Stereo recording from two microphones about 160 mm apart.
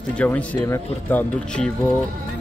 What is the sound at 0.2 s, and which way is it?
Speech, 10° left (ahead or behind).